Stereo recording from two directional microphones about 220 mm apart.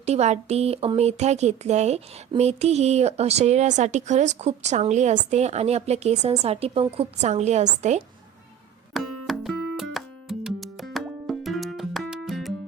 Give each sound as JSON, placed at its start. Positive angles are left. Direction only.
{"t": 0.0, "sound": "speech", "side_deg": -30}
{"t": 9.2, "sound": "music", "side_deg": 0}